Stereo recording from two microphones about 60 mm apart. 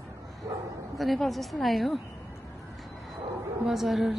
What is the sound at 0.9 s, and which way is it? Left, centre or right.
A woman's voice, centre.